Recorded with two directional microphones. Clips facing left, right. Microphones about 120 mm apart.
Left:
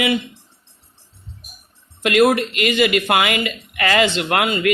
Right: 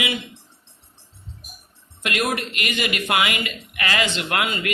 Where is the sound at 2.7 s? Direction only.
60° left (ahead or behind).